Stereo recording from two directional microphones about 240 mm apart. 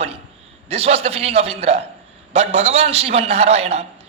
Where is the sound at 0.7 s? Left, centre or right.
Right.